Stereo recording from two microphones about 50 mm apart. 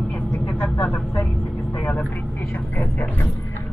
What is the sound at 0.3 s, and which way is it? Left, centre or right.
Vehicle, left.